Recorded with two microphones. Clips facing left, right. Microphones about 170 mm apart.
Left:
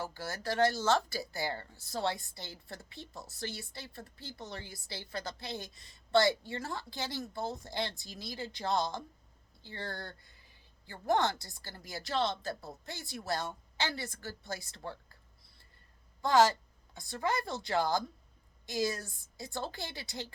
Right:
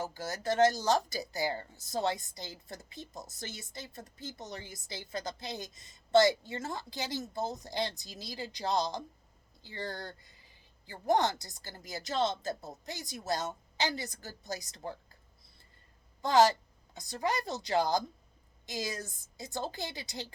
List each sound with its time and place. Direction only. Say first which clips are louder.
0.0 s a woman's voice: right 2 dB; 20° right (ahead or behind)
16.2 s a woman's voice: right 1 dB; 20° right (ahead or behind)